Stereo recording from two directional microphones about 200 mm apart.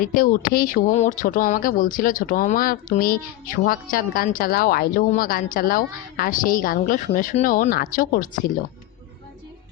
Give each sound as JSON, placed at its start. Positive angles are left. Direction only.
{"t": 0.0, "sound": "speech", "side_deg": 45}